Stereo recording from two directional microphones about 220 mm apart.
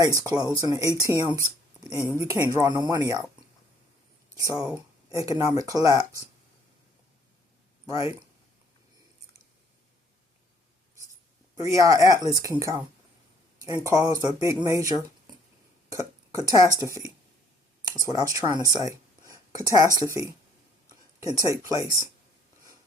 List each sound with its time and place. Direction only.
0.2 s speech: 20° right (ahead or behind)
1.3 s a sound: 5° right (ahead or behind)
2.1 s speech: 15° right (ahead or behind)
4.4 s speech: 15° right (ahead or behind)
11.6 s speech: 15° right (ahead or behind)